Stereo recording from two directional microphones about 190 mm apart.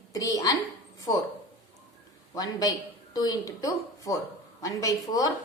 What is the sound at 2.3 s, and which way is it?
A woman's voice, 20° left (ahead or behind).